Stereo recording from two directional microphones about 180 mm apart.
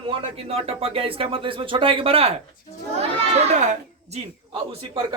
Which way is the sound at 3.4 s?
40° right (ahead or behind).